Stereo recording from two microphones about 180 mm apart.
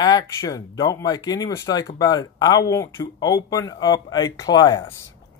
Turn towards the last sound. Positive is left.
turn(degrees=20)  # may be behind; listen again after turning